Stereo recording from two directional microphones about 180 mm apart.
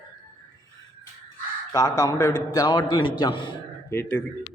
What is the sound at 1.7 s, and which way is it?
Speech, 20° left (ahead or behind).